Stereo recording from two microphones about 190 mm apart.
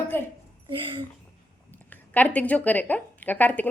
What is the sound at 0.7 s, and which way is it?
Speech, 25° right (ahead or behind).